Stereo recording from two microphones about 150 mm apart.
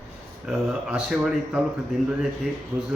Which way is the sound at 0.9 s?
5° right (ahead or behind).